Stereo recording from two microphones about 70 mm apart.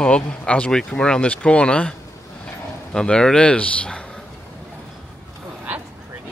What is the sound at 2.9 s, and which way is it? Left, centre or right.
Speech, centre.